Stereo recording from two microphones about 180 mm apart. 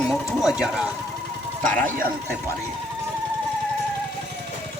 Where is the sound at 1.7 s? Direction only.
10° left (ahead or behind).